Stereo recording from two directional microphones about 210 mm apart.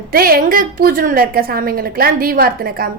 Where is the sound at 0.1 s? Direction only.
45° right (ahead or behind).